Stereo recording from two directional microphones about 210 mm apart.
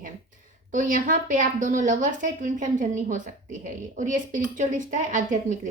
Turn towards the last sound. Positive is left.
turn(degrees=-40)  # may be behind; listen again after turning